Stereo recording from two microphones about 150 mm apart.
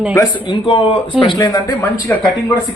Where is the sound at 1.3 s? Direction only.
25° left (ahead or behind).